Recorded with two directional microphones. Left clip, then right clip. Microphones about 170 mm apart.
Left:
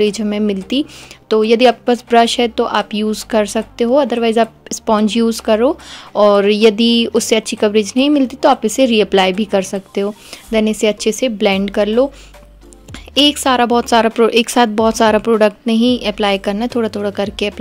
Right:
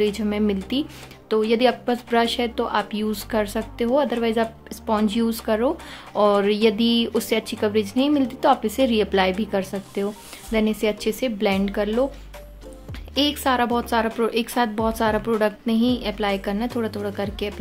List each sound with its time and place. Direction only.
0.0 s a woman's voice: 35° left (ahead or behind)